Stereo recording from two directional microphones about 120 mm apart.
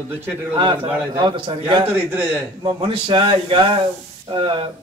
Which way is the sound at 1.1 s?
40° right (ahead or behind).